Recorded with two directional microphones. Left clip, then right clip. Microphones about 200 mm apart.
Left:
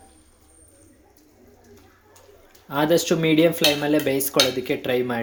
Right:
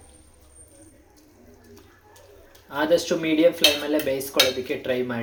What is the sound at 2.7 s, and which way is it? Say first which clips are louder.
Speech: left 1 dB; 50° left (ahead or behind).